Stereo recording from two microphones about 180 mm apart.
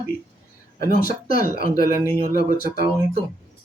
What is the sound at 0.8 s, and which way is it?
Speech, 50° left (ahead or behind).